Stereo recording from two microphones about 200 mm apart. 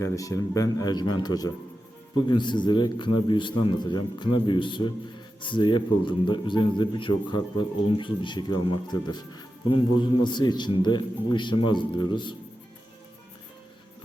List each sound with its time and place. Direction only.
0.0 s speech: 15° left (ahead or behind)